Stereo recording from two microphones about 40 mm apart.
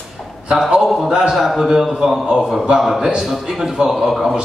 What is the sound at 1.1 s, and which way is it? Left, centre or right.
Speech, centre.